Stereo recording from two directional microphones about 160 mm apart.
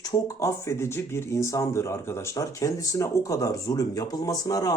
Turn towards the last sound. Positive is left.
turn(degrees=20)  # may be behind; listen again after turning